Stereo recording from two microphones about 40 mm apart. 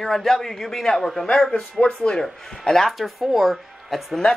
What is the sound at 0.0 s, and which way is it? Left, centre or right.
Speech, centre.